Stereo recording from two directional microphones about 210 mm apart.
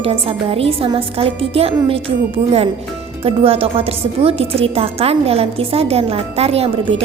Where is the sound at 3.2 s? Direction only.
25° right (ahead or behind).